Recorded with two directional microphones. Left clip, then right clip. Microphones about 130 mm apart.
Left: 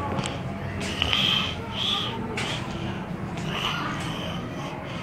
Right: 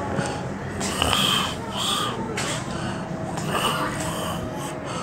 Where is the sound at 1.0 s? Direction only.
45° right (ahead or behind).